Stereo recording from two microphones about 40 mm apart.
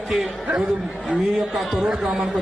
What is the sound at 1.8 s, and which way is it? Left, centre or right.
Speech, centre.